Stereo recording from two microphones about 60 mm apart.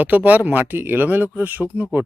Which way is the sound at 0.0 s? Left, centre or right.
Right.